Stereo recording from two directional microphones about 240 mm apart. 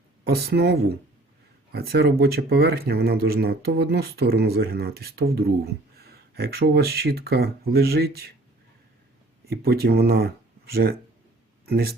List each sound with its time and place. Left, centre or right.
0.3 s speech: right
9.5 s speech: right